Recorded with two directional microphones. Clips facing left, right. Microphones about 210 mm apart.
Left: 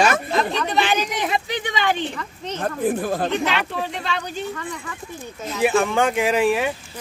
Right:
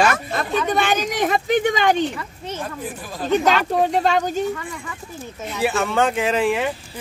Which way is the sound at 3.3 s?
40° right (ahead or behind).